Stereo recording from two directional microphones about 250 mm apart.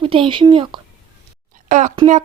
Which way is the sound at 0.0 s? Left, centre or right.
Right.